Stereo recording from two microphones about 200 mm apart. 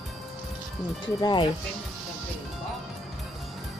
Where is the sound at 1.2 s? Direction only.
20° left (ahead or behind).